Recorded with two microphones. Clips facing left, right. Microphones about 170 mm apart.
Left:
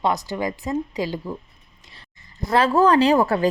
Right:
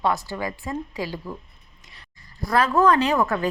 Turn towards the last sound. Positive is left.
turn(degrees=30)  # may be behind; listen again after turning